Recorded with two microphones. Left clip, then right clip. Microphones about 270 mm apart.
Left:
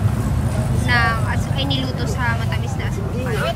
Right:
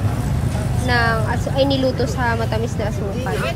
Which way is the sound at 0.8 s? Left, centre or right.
Centre.